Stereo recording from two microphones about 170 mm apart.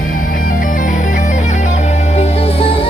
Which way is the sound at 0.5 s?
50° left (ahead or behind).